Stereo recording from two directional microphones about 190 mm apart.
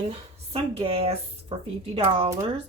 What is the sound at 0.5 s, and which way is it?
Speech, 30° right (ahead or behind).